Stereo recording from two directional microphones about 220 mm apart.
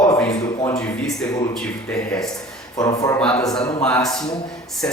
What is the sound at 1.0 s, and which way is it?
Speech, 5° left (ahead or behind).